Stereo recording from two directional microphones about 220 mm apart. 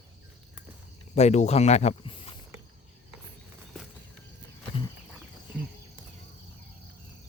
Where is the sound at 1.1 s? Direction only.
30° left (ahead or behind).